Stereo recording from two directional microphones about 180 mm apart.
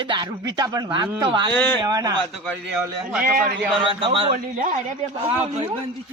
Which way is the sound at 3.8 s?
30° right (ahead or behind).